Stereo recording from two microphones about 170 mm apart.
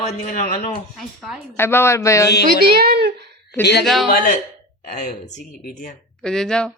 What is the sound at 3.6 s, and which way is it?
Speech, 75° left (ahead or behind).